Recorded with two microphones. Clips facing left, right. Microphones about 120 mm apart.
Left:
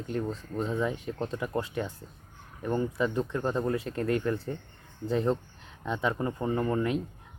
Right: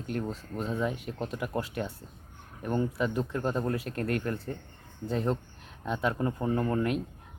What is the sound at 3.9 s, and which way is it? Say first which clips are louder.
Speech: left 2 dB; 60° right (ahead or behind).